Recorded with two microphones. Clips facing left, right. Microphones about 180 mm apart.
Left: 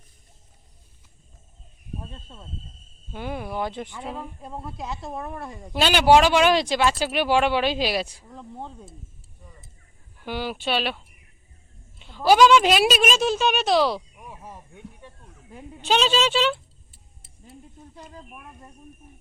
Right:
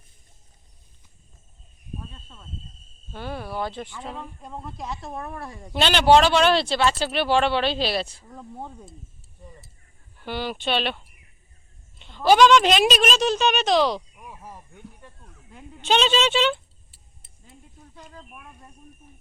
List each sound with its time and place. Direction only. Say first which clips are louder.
2.0 s speech: left 2 dB; 25° left (ahead or behind)
4.1 s speech: left 2 dB; 5° left (ahead or behind)
8.3 s speech: even; 10° right (ahead or behind)
10.2 s speech: even; 10° left (ahead or behind)
11.9 s a sound: even; 5° left (ahead or behind)
15.7 s speech: right 1 dB; 5° left (ahead or behind)